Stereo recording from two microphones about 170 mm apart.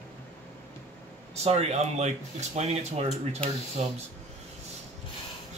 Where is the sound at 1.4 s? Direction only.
40° right (ahead or behind).